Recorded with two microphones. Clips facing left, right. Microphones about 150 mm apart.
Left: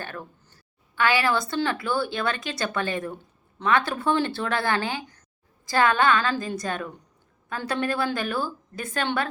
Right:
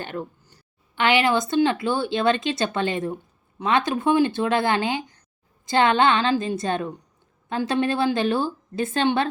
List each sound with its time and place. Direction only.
0.0 s a woman's voice: 20° right (ahead or behind)